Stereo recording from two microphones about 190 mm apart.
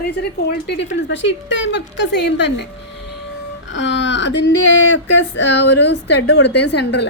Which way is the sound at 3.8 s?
70° left (ahead or behind).